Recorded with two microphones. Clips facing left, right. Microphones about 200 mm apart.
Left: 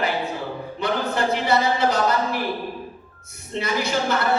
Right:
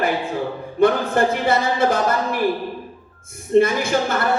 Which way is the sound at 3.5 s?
50° right (ahead or behind).